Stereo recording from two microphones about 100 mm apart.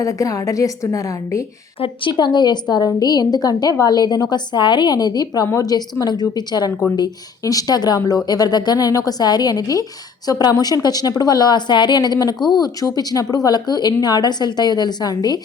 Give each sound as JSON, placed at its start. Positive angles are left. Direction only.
{"t": 0.0, "sound": "a woman's voice", "side_deg": 35}
{"t": 1.8, "sound": "a woman's voice", "side_deg": 55}